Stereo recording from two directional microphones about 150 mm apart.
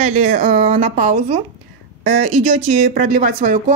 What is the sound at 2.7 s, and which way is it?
Speech, 70° right (ahead or behind).